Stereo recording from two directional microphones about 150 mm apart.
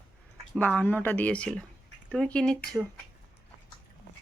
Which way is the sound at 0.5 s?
10° left (ahead or behind).